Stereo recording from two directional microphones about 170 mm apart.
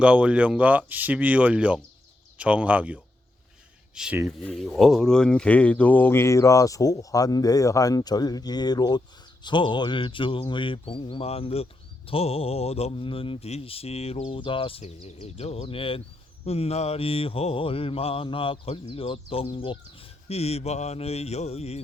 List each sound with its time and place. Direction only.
0.0 s speech: 5° right (ahead or behind); by 21.8 s 35° left (ahead or behind)